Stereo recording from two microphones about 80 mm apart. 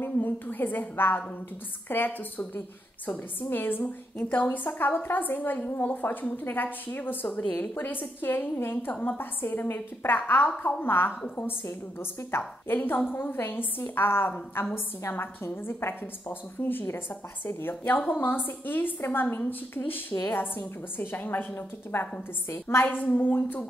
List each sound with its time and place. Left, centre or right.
0.0 s a woman's voice: left
12.3 s a woman's voice: left
22.9 s a woman's voice: left